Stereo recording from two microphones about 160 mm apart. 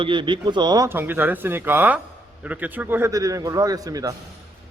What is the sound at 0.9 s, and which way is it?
A man's voice, 15° right (ahead or behind).